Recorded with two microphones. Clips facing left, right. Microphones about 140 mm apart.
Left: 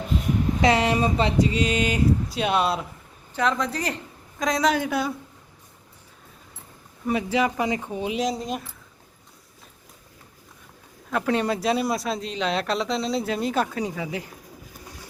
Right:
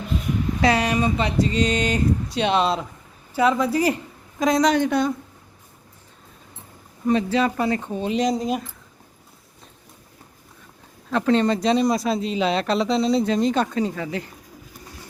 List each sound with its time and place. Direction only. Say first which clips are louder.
0.6 s speech: right 1 dB; 25° left (ahead or behind)
1.4 s speech: right 1 dB; 10° left (ahead or behind)
7.1 s speech: right 3 dB; 10° left (ahead or behind)
8.2 s speech: right 7 dB; centre (ahead or behind)
11.1 s speech: right 4 dB; 10° left (ahead or behind)